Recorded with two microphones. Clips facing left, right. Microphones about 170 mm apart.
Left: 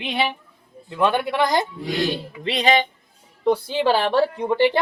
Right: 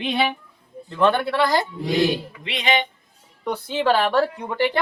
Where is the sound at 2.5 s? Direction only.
35° left (ahead or behind).